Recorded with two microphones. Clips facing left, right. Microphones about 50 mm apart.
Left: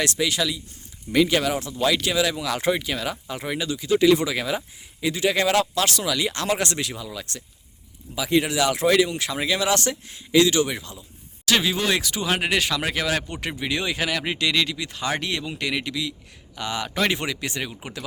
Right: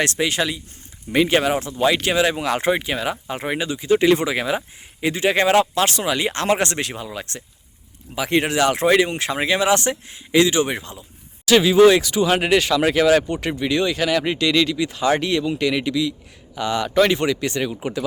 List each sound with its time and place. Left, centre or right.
0.0 s speech: right
2.0 s speech: right
3.3 s speech: right
8.1 s speech: right
10.7 s speech: right
11.4 s speech: centre